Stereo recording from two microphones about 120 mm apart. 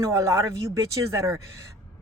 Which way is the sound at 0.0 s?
25° right (ahead or behind).